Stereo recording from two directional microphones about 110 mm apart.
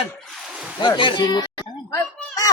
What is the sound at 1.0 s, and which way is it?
Speech, 50° left (ahead or behind).